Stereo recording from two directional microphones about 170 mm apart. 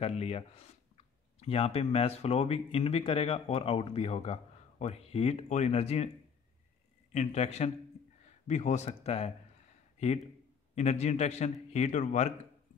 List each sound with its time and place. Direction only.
0.0 s speech: 40° left (ahead or behind)
7.1 s a man's voice: 40° left (ahead or behind)